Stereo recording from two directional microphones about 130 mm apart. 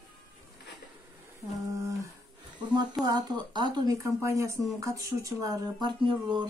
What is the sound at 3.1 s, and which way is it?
Speech, 35° right (ahead or behind).